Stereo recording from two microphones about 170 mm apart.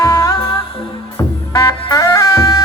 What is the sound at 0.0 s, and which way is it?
Music, 20° left (ahead or behind).